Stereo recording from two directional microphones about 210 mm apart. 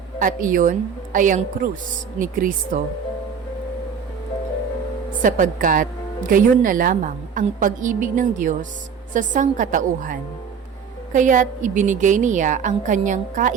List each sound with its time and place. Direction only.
0.2 s a woman's voice: 40° right (ahead or behind)
5.2 s a woman's voice: 40° right (ahead or behind)